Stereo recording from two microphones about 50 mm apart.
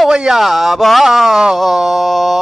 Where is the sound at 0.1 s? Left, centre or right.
Centre.